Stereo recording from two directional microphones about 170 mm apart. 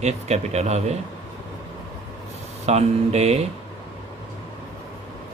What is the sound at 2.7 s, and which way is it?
Speech, 40° right (ahead or behind).